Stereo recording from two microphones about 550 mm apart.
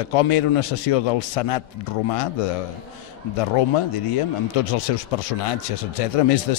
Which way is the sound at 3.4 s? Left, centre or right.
Left.